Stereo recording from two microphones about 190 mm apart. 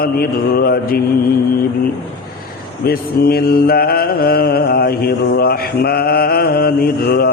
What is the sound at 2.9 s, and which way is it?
Mantra, 55° left (ahead or behind).